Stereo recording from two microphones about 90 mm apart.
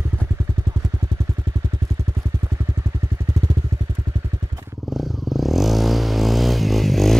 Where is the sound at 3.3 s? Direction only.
45° right (ahead or behind).